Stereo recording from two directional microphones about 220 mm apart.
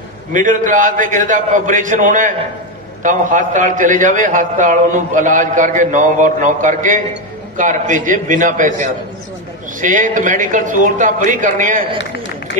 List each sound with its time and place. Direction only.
0.3 s a man's voice: 35° right (ahead or behind)